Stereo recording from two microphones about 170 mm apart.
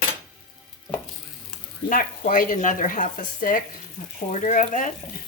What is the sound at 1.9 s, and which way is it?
Speech, 50° left (ahead or behind).